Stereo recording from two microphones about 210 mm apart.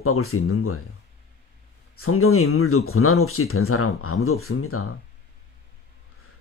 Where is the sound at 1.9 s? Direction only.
90° left.